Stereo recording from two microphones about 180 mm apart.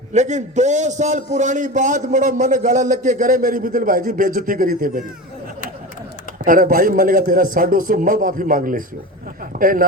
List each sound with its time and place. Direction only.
0.1 s a man's voice: 40° right (ahead or behind)
6.4 s a man's voice: 50° right (ahead or behind)